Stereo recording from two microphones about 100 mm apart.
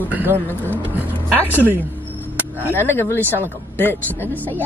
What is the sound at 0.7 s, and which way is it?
Vehicle, 20° right (ahead or behind).